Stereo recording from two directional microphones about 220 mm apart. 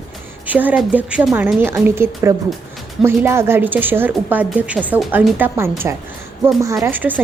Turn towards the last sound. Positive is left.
turn(degrees=-10)  # may be behind; listen again after turning